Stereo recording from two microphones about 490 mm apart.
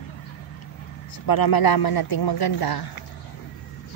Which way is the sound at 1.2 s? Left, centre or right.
Left.